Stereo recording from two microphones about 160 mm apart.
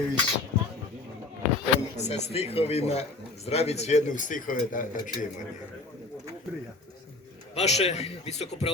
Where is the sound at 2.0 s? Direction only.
45° left (ahead or behind).